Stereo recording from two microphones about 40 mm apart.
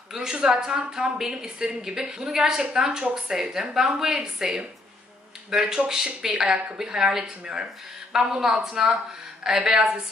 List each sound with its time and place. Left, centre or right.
0.1 s a woman's voice: centre